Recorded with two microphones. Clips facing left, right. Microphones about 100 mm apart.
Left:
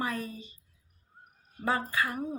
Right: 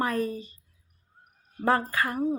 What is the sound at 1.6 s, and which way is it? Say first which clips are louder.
Speech: right 5 dB; 45° right (ahead or behind).